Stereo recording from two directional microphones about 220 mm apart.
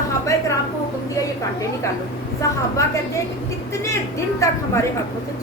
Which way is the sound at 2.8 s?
15° left (ahead or behind).